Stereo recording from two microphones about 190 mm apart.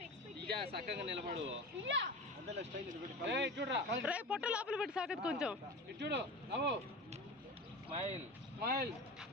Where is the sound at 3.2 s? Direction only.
65° right (ahead or behind).